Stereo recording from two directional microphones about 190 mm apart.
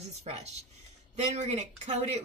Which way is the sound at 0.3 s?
35° right (ahead or behind).